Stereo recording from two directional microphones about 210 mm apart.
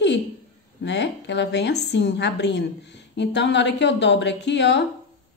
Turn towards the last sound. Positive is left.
turn(degrees=55)  # may be behind; listen again after turning